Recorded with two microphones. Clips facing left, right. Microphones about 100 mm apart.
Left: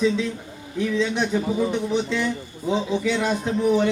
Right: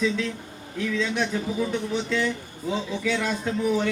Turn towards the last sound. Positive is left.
turn(degrees=20)  # may be behind; listen again after turning